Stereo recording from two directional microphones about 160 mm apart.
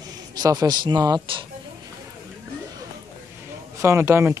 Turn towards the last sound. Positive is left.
turn(degrees=-15)  # may be behind; listen again after turning